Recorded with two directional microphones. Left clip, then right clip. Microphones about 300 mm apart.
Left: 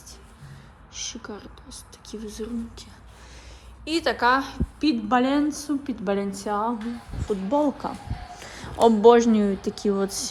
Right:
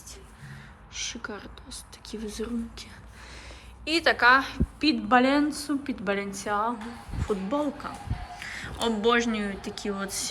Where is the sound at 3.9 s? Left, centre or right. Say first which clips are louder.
Right 1 dB; centre.